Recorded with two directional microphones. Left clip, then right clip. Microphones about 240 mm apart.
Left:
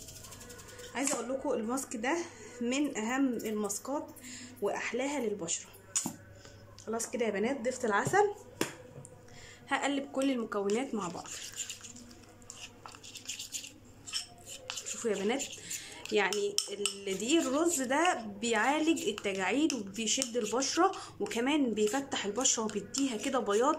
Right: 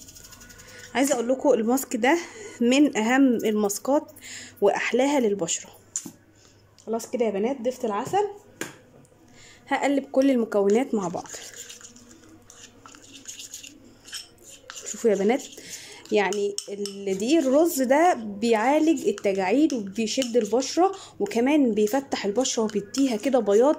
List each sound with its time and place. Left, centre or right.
0.9 s speech: right
6.9 s speech: centre
9.7 s a woman's voice: right
15.0 s a sound: right
16.1 s a woman's voice: right